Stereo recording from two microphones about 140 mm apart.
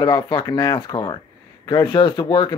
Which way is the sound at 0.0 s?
30° left (ahead or behind).